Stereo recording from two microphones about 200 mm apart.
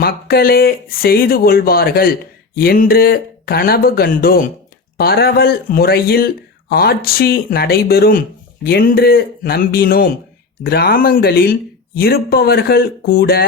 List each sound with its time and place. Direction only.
0.0 s speech: 50° left (ahead or behind)